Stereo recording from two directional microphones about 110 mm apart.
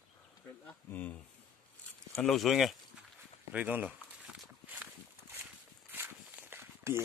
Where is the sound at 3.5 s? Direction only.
15° right (ahead or behind).